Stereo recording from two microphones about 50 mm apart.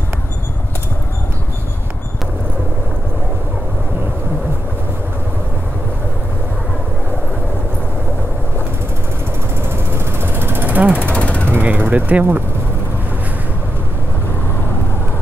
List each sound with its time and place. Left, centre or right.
9.9 s vehicle: right
11.0 s ratchet: left
11.6 s vehicle: right